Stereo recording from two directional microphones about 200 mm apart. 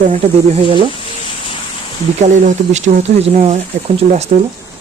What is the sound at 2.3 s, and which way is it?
Speech, 35° right (ahead or behind).